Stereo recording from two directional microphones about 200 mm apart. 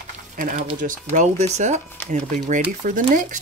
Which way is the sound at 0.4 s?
40° right (ahead or behind).